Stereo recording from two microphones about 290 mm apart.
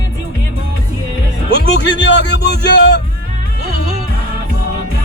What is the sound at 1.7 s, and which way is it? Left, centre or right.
Speech, left.